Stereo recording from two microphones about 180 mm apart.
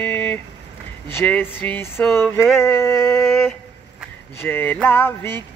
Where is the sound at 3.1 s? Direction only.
Centre (ahead or behind).